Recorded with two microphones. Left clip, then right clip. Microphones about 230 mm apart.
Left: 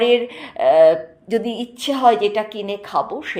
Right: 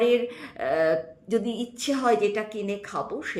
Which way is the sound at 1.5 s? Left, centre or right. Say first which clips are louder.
Left 6 dB; left.